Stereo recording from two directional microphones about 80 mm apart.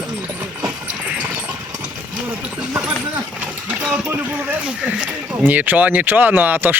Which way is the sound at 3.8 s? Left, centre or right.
Centre.